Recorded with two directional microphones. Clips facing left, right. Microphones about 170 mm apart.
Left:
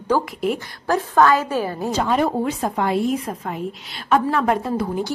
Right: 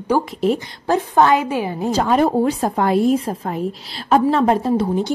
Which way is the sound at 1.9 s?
40° right (ahead or behind).